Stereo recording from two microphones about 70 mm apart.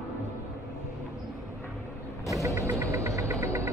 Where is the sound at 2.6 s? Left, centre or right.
Right.